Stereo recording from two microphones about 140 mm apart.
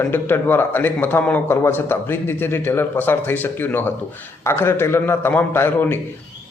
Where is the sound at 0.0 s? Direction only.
15° left (ahead or behind).